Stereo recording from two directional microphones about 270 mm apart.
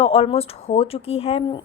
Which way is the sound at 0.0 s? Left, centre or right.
Left.